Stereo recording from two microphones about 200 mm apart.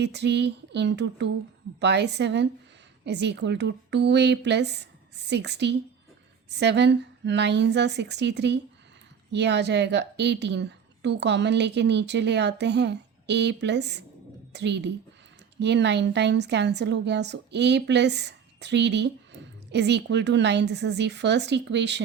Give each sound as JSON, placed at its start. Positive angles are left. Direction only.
{"t": 0.0, "sound": "a woman's voice", "side_deg": -55}